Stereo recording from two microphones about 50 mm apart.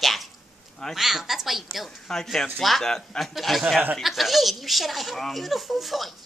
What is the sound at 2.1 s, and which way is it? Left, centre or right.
Speech, centre.